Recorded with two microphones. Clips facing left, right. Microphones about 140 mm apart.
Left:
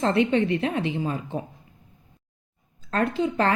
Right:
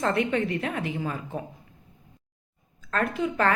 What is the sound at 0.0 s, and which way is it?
Speech, 30° left (ahead or behind).